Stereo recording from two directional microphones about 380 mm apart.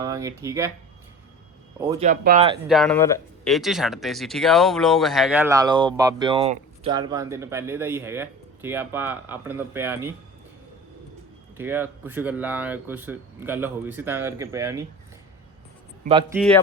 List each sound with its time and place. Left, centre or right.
0.0 s speech: centre
1.8 s speech: centre
2.0 s speech: centre
2.6 s speech: centre
11.5 s speech: centre
16.0 s speech: centre